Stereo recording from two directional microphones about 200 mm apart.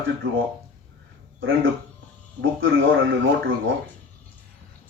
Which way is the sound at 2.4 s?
80° right.